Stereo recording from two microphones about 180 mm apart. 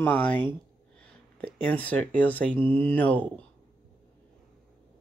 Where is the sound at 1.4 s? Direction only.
5° left (ahead or behind).